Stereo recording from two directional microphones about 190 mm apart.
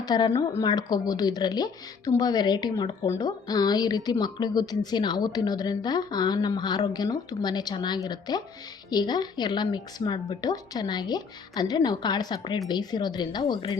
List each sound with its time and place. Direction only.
0.0 s speech: 20° left (ahead or behind)